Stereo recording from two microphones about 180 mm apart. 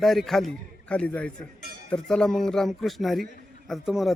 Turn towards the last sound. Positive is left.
turn(degrees=0)  # may be behind; listen again after turning